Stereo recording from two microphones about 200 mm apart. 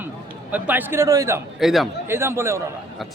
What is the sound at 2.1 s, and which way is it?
Speech, 10° right (ahead or behind).